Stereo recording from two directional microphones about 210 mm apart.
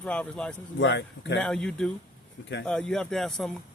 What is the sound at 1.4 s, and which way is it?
Speech, 5° left (ahead or behind).